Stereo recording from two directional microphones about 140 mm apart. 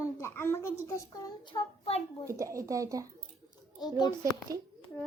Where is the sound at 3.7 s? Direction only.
30° left (ahead or behind).